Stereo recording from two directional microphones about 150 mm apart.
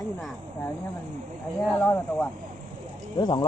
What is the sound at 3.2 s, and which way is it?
Speech, 35° left (ahead or behind).